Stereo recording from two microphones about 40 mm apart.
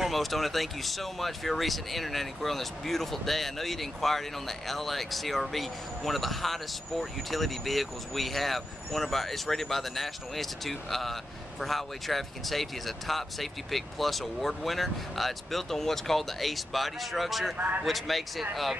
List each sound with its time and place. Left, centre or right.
0.0 s speech: centre
17.6 s a man's voice: right
17.8 s speech: centre